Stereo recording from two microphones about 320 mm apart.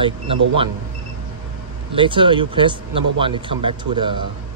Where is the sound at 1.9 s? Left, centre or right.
Centre.